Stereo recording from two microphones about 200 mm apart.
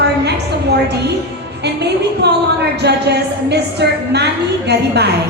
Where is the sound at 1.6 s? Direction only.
55° right (ahead or behind).